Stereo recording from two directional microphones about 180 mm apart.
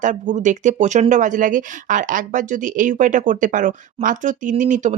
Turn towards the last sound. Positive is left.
turn(degrees=-45)  # may be behind; listen again after turning